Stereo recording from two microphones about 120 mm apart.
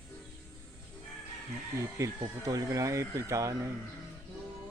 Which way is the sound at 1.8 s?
25° right (ahead or behind).